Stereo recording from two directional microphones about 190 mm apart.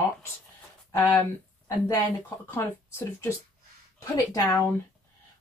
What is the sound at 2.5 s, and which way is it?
Speech, 10° left (ahead or behind).